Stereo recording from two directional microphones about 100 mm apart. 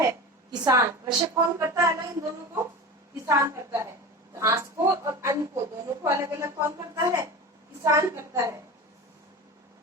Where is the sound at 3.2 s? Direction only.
30° right (ahead or behind).